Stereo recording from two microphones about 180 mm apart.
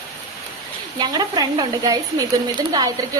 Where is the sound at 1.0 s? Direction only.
20° right (ahead or behind).